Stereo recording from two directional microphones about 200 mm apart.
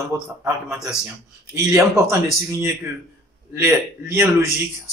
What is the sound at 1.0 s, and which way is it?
A man's voice, 15° right (ahead or behind).